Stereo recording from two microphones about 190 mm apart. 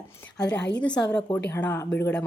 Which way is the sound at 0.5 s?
65° left (ahead or behind).